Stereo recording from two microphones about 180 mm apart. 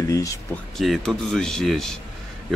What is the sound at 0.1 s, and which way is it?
Speech, 20° left (ahead or behind).